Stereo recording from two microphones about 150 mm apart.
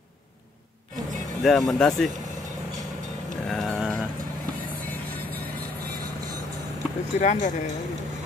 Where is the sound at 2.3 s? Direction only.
55° right (ahead or behind).